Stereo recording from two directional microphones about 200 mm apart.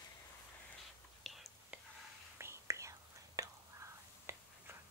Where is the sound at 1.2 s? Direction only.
Centre (ahead or behind).